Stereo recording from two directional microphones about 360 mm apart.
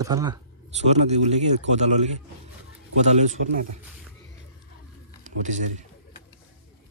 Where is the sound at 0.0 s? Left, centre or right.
Centre.